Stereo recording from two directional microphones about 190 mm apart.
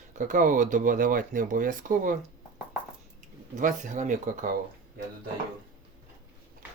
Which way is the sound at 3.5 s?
40° right (ahead or behind).